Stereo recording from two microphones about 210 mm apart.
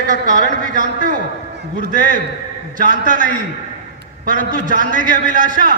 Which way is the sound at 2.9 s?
40° right (ahead or behind).